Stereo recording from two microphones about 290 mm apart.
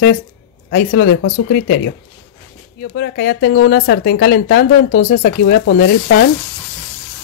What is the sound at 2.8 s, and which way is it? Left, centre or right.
Speech, left.